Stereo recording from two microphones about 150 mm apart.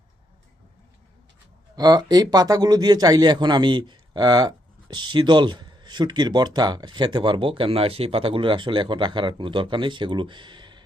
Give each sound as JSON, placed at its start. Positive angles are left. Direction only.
{"t": 1.7, "sound": "speech", "side_deg": -25}